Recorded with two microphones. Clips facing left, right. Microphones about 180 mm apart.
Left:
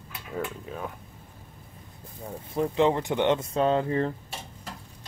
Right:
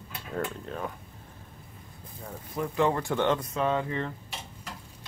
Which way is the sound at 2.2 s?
25° left (ahead or behind).